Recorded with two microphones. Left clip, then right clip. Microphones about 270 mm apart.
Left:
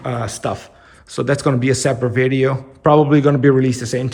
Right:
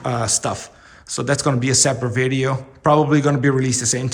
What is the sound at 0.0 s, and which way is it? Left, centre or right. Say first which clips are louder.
Speech: right 1 dB; centre.